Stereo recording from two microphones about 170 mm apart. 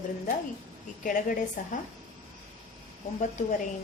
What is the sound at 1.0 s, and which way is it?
Speech, 50° left (ahead or behind).